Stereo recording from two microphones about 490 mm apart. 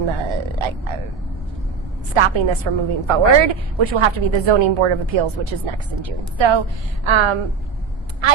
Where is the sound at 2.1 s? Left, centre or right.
Right.